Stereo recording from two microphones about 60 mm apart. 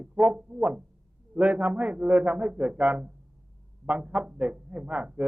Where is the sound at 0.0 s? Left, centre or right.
Right.